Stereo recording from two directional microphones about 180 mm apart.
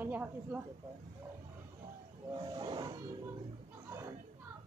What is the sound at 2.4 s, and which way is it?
Wild animals, 25° right (ahead or behind).